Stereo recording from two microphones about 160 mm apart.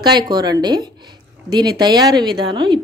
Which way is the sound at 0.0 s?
25° right (ahead or behind).